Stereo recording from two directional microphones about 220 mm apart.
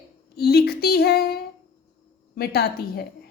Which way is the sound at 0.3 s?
45° left (ahead or behind).